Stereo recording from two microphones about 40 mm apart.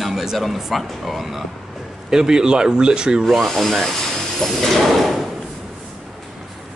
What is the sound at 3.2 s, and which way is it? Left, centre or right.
Speech, centre.